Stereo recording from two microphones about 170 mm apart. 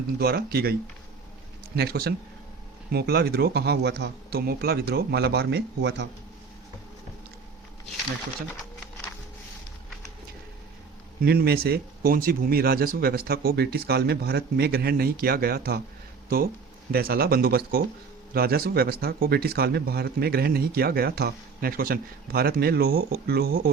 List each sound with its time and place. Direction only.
0.2 s speech: 65° right (ahead or behind); by 6.1 s 90° right
11.2 s speech: 60° right (ahead or behind)
16.9 s speech: 65° right (ahead or behind)